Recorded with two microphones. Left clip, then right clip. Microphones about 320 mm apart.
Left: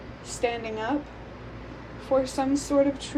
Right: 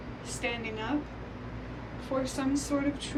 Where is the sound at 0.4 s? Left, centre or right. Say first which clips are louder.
Left 6 dB; centre.